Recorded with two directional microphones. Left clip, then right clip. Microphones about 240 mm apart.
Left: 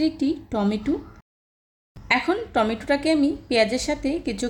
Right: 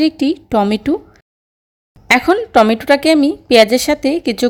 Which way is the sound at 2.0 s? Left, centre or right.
Right.